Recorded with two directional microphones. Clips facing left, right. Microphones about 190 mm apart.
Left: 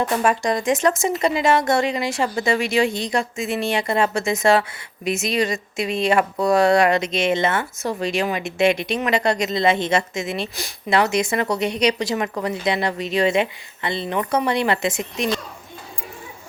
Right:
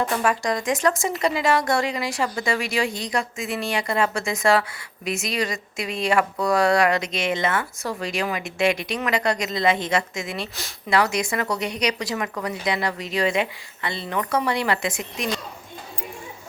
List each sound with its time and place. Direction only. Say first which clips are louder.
0.2 s speech: left 3 dB; 25° left (ahead or behind)